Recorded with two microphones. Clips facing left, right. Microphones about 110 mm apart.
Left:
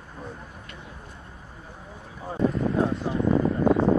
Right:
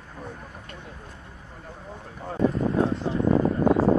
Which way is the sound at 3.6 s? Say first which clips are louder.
Even; 5° right (ahead or behind).